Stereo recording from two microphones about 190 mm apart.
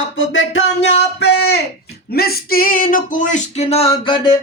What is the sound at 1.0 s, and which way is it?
Speech, 60° left (ahead or behind).